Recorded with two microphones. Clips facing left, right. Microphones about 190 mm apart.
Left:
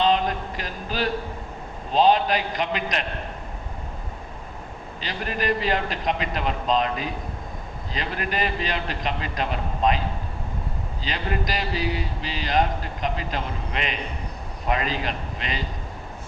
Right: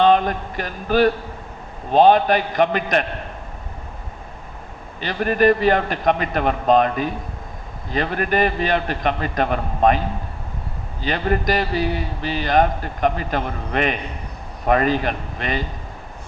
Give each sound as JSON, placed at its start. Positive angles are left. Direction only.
{"t": 0.0, "sound": "a sound", "side_deg": -55}
{"t": 1.9, "sound": "speech", "side_deg": -55}
{"t": 4.9, "sound": "speech", "side_deg": -55}
{"t": 11.0, "sound": "speech", "side_deg": -55}